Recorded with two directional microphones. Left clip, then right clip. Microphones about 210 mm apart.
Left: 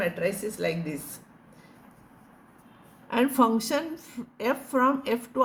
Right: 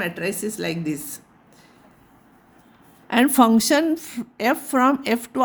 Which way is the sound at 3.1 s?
50° right (ahead or behind).